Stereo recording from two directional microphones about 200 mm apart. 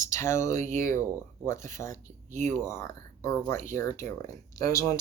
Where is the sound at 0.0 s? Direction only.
15° left (ahead or behind).